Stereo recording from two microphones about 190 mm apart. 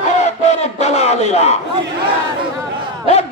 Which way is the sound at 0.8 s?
35° left (ahead or behind).